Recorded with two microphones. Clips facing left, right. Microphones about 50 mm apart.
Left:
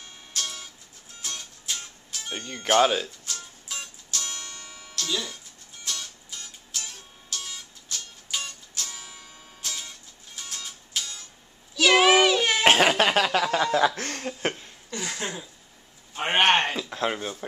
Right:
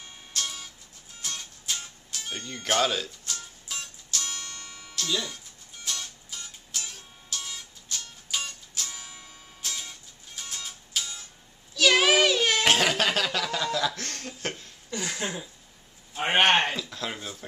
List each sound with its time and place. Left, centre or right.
0.3 s music: centre
2.3 s speech: centre
3.3 s music: centre
4.9 s speech: centre
5.9 s music: centre
11.7 s a sound: centre
12.6 s speech: left
14.9 s a sound: centre
16.2 s a man's voice: centre
16.9 s speech: left